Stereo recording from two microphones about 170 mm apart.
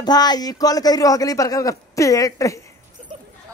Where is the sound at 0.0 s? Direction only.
25° left (ahead or behind).